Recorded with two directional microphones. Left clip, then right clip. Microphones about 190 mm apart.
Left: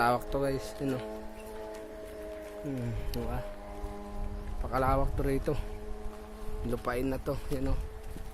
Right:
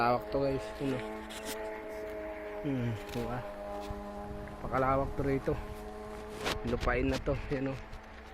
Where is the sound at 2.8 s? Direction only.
5° left (ahead or behind).